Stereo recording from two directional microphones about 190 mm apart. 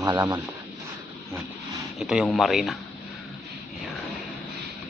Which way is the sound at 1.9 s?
Centre (ahead or behind).